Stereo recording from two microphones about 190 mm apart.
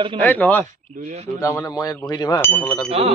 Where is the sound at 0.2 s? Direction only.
10° left (ahead or behind).